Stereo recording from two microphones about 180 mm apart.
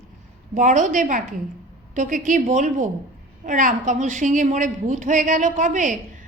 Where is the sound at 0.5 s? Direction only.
45° right (ahead or behind).